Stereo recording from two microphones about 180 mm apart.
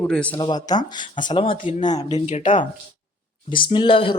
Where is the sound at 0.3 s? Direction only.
25° left (ahead or behind).